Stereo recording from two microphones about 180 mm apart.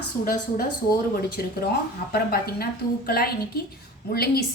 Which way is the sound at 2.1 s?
60° left (ahead or behind).